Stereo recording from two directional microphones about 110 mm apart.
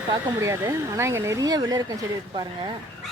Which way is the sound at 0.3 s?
25° right (ahead or behind).